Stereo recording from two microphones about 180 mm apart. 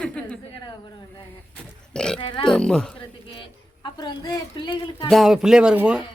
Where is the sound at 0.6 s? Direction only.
25° left (ahead or behind).